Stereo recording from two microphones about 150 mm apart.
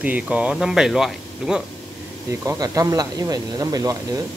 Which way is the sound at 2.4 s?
20° right (ahead or behind).